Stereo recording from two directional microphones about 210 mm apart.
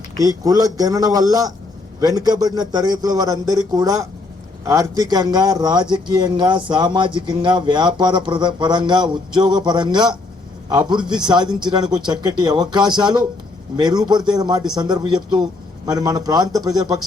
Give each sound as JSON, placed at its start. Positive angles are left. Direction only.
{"t": 0.2, "sound": "a man's voice", "side_deg": -15}